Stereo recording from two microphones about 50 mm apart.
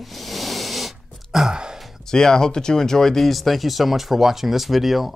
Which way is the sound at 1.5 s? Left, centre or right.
Centre.